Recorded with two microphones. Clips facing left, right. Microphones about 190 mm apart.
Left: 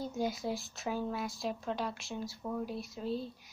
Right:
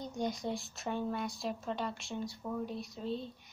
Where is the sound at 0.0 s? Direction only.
5° left (ahead or behind).